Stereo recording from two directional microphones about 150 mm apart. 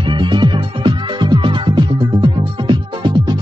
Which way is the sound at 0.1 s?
30° right (ahead or behind).